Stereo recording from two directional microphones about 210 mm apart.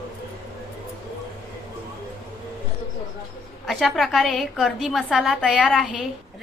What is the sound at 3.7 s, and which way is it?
A woman's voice, centre (ahead or behind).